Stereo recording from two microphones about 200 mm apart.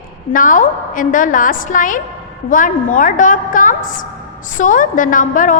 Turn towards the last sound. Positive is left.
turn(degrees=40)  # may be behind; listen again after turning